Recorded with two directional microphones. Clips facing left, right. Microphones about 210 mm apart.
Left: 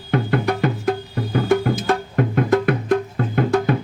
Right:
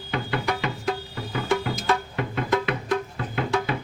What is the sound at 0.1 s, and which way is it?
Music, 50° left (ahead or behind).